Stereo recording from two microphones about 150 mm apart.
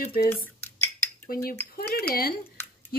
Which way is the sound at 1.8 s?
90° left.